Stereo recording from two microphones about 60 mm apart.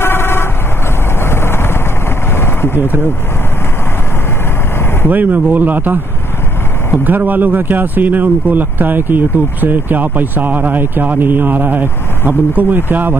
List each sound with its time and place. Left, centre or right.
0.0 s vehicle: left
5.1 s speech: right
7.1 s speech: right